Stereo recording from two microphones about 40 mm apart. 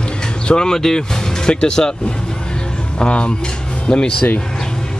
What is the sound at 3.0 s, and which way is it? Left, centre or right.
Speech, left.